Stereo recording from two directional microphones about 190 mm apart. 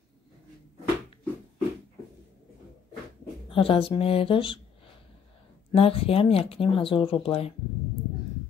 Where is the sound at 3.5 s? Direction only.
30° left (ahead or behind).